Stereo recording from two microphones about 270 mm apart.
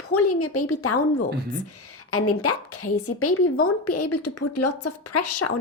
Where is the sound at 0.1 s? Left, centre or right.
Left.